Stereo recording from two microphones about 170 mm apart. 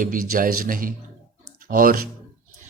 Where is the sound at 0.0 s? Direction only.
55° right (ahead or behind).